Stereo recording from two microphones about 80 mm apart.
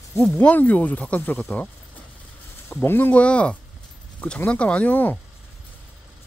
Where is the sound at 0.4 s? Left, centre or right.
Centre.